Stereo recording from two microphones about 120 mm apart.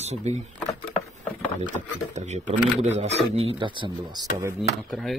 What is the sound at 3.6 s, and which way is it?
Speech, 40° right (ahead or behind).